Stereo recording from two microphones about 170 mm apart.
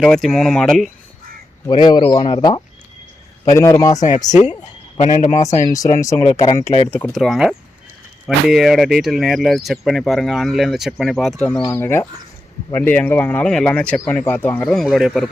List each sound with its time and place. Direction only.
0.0 s speech: 5° left (ahead or behind)
1.6 s speech: 25° left (ahead or behind)
4.3 s a man's voice: 45° left (ahead or behind)
5.7 s speech: 20° left (ahead or behind)
6.9 s speech: 5° left (ahead or behind)